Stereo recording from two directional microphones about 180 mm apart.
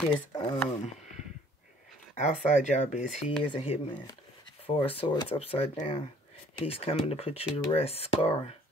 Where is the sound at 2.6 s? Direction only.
40° left (ahead or behind).